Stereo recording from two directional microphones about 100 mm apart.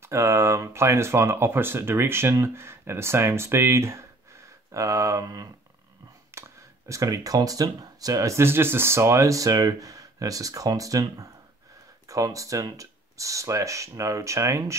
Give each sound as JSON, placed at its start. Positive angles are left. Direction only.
{"t": 0.0, "sound": "speech", "side_deg": -30}
{"t": 6.3, "sound": "a sound", "side_deg": -25}
{"t": 6.9, "sound": "speech", "side_deg": -35}